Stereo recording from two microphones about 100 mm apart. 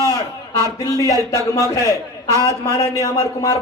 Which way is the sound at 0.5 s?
35° left (ahead or behind).